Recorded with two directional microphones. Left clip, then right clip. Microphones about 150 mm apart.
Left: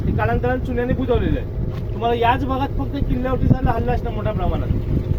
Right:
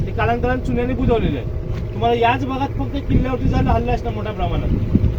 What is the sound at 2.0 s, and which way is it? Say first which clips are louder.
Speech: right 1 dB; 40° right (ahead or behind).